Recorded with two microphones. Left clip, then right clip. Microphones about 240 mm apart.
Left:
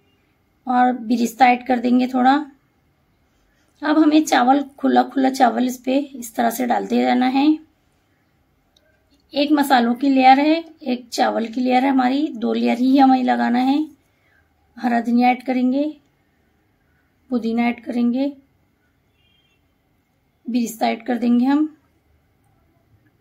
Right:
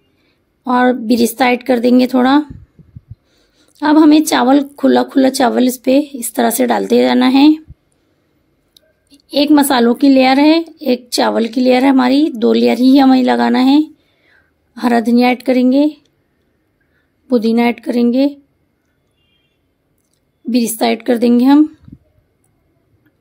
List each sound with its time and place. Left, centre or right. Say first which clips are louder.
0.7 s a woman's voice: right 5 dB; right
3.7 s a woman's voice: right 7 dB; right
8.7 s a woman's voice: right 10 dB; right
17.3 s a woman's voice: right 9 dB; right
20.5 s a woman's voice: right 6 dB; right